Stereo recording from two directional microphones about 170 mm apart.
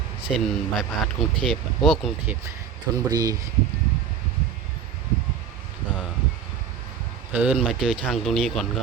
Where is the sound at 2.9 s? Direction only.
20° right (ahead or behind).